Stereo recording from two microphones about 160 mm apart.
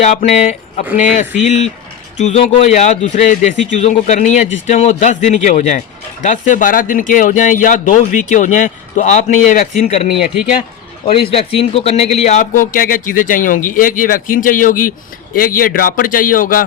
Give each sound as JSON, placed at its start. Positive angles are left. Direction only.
{"t": 0.0, "sound": "a man's voice", "side_deg": 45}